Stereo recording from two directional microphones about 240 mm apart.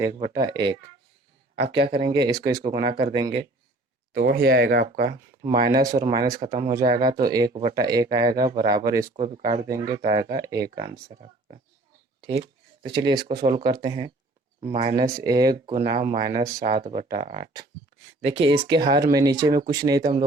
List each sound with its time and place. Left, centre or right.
0.3 s speech: centre
1.5 s speech: right
2.0 s speech: centre
4.1 s speech: right
5.4 s speech: right
9.1 s speech: right
9.4 s speech: centre
15.5 s speech: right
15.9 s speech: centre